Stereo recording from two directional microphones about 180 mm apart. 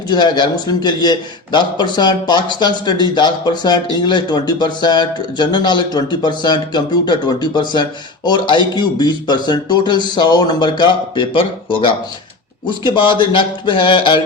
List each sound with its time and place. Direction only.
0.1 s speech: 25° left (ahead or behind)
12.6 s speech: 25° left (ahead or behind)